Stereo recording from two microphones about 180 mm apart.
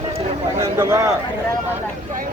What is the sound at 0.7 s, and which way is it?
Speech, 15° right (ahead or behind).